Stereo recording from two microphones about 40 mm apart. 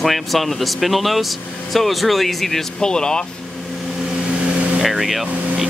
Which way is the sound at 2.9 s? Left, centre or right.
Centre.